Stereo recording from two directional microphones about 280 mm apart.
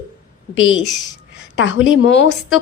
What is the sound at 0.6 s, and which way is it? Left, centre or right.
A woman's voice, left.